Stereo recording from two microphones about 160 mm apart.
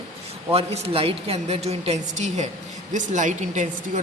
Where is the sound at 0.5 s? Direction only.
35° right (ahead or behind).